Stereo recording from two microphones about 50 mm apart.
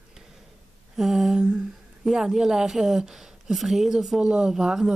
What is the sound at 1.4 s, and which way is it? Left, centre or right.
A woman's voice, centre.